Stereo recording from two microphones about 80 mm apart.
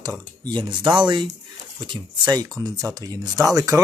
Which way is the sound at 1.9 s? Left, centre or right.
Right.